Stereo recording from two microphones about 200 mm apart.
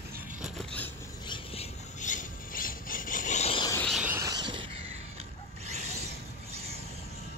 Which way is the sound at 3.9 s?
5° right (ahead or behind).